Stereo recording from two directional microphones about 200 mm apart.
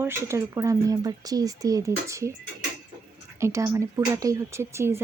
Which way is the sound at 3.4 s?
15° right (ahead or behind).